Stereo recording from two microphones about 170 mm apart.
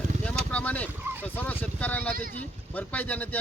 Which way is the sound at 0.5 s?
10° left (ahead or behind).